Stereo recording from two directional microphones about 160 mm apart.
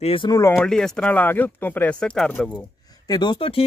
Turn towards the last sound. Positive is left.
turn(degrees=35)  # may be behind; listen again after turning